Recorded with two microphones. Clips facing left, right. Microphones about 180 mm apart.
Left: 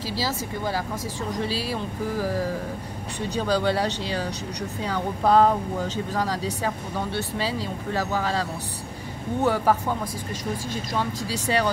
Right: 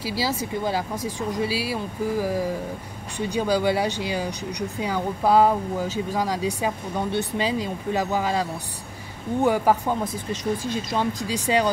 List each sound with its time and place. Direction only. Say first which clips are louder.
0.0 s speech: right 2 dB; 10° right (ahead or behind)